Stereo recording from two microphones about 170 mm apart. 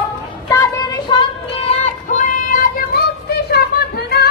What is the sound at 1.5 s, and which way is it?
Child singing, 40° left (ahead or behind).